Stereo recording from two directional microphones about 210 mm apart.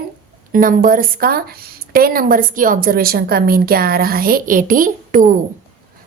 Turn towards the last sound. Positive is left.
turn(degrees=-40)  # may be behind; listen again after turning